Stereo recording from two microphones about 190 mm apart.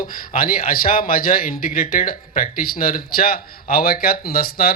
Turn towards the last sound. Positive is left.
turn(degrees=55)  # may be behind; listen again after turning